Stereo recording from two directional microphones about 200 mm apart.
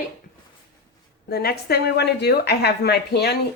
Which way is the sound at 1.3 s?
50° left (ahead or behind).